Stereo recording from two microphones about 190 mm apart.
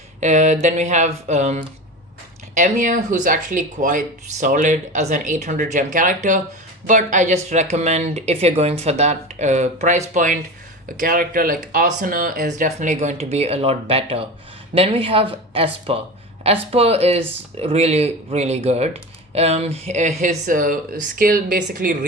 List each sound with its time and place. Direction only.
0.2 s speech: 40° right (ahead or behind)